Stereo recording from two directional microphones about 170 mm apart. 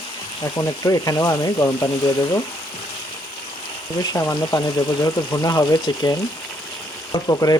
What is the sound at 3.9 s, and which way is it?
Speech, 20° left (ahead or behind).